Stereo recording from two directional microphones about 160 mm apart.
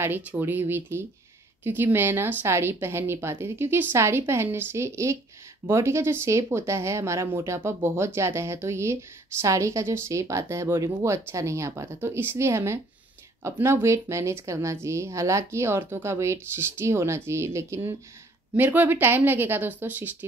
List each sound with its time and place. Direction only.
0.0 s a woman's voice: 15° right (ahead or behind)